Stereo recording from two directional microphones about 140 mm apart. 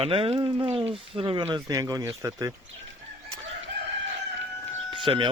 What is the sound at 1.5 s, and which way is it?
Speech, 25° right (ahead or behind).